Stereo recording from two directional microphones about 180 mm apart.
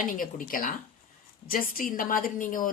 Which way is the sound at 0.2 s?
50° left (ahead or behind).